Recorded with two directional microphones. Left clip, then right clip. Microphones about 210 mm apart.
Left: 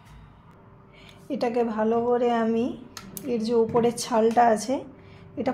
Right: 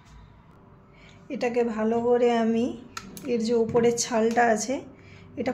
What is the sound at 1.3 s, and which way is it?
A woman's voice, 10° left (ahead or behind).